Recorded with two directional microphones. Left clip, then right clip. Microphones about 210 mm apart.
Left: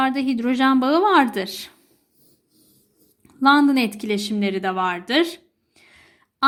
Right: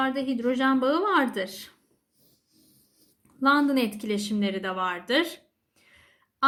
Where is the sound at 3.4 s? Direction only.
30° left (ahead or behind).